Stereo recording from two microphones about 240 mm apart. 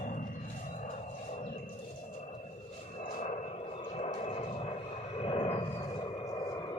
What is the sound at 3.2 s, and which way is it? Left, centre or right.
Vehicle, left.